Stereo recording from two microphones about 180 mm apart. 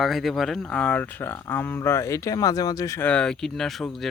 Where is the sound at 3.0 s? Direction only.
5° left (ahead or behind).